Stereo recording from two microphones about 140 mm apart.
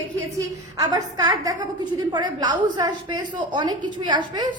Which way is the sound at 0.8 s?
25° right (ahead or behind).